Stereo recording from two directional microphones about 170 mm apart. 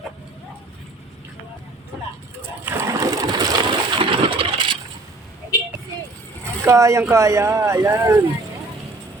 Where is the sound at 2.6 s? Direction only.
15° right (ahead or behind).